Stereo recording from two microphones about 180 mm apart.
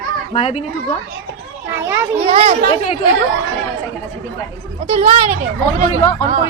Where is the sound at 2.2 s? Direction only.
35° right (ahead or behind).